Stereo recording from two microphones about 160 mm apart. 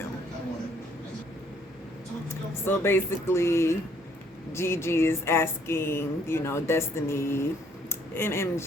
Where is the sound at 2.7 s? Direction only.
15° left (ahead or behind).